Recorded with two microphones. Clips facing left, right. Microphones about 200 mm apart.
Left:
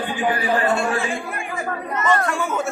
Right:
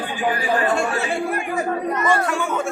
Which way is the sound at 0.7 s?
40° right (ahead or behind).